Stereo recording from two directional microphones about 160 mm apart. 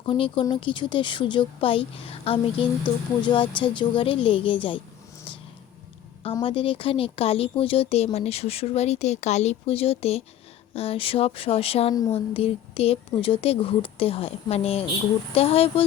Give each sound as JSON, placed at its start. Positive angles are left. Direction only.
{"t": 0.0, "sound": "speech", "side_deg": 30}
{"t": 6.4, "sound": "speech", "side_deg": 35}